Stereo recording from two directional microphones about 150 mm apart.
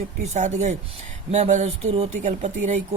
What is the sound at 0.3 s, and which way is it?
Speech, 55° right (ahead or behind).